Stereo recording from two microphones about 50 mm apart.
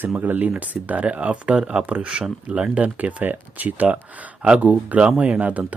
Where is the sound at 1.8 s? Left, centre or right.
Right.